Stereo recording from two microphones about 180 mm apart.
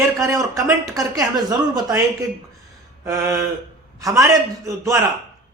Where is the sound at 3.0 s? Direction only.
20° right (ahead or behind).